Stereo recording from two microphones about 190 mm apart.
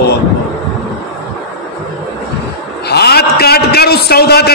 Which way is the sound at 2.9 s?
55° left (ahead or behind).